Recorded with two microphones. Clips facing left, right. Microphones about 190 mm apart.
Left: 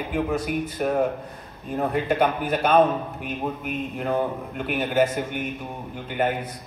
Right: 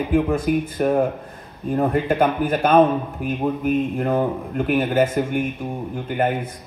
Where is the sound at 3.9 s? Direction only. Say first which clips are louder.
Right 4 dB; 50° right (ahead or behind).